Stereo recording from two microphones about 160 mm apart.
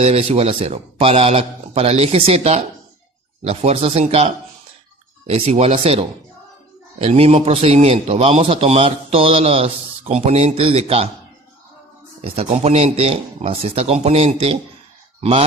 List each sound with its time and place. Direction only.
0.0 s a man's voice: 40° right (ahead or behind)
5.3 s a man's voice: 40° right (ahead or behind)
12.2 s a man's voice: 40° right (ahead or behind)